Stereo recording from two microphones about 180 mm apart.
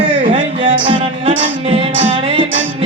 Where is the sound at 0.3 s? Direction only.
30° right (ahead or behind).